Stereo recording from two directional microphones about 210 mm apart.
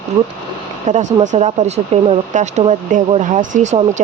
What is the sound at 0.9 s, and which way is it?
Speech, 35° right (ahead or behind).